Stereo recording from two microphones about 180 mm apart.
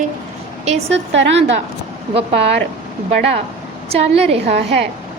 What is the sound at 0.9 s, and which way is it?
Speech, 90° right.